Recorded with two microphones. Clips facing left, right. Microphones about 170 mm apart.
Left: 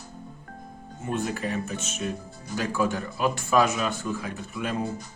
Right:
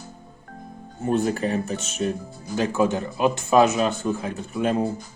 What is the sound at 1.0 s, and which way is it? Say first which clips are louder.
Speech: right 7 dB; 35° right (ahead or behind).